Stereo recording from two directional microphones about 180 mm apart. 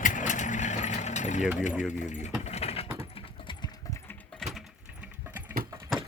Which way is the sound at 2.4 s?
35° left (ahead or behind).